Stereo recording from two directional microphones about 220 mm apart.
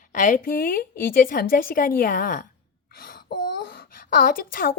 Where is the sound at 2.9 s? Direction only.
45° left (ahead or behind).